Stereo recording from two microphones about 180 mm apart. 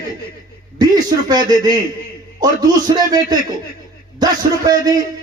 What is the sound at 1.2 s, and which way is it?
Speech, 20° right (ahead or behind).